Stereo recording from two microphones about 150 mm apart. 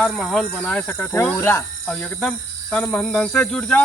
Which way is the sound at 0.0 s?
5° left (ahead or behind).